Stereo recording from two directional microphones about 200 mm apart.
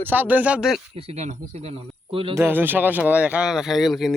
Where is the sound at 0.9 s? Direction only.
30° right (ahead or behind).